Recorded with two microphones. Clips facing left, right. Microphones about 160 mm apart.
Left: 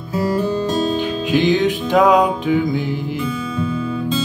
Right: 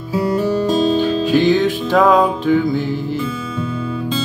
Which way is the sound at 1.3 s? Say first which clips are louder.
Even; 20° left (ahead or behind).